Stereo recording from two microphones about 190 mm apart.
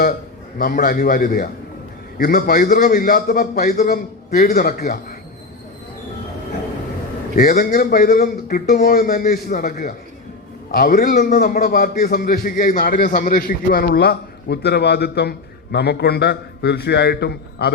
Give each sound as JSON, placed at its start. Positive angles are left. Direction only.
{"t": 0.6, "sound": "a man's voice", "side_deg": 45}
{"t": 7.5, "sound": "a man's voice", "side_deg": 55}